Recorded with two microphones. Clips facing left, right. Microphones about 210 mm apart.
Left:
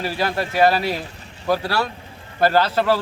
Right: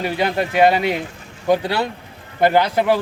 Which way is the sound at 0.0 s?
20° right (ahead or behind).